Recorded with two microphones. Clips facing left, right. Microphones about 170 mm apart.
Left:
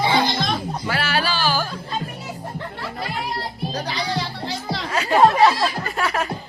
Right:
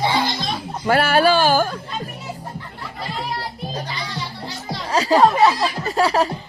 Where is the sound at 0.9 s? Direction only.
50° right (ahead or behind).